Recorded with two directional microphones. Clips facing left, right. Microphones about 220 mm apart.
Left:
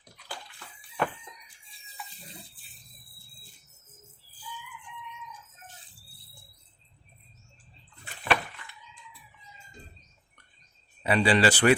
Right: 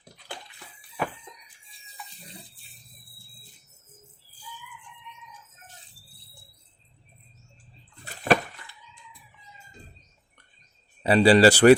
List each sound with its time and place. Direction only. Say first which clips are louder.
0.9 s chicken: left 1 dB; 10° right (ahead or behind)
1.9 s water: even; centre (ahead or behind)
8.0 s a sound: right 6 dB; 40° right (ahead or behind)
11.0 s speech: right 7 dB; 35° right (ahead or behind)